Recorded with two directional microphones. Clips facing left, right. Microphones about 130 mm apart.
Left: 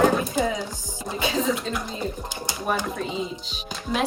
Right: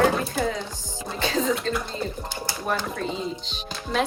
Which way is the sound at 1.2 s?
10° left (ahead or behind).